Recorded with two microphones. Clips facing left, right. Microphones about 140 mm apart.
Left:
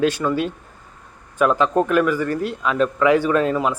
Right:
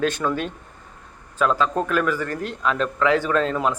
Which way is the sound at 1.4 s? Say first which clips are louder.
Left 4 dB; 15° left (ahead or behind).